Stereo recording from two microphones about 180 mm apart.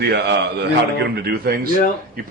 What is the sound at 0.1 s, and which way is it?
A man's voice, 70° right (ahead or behind).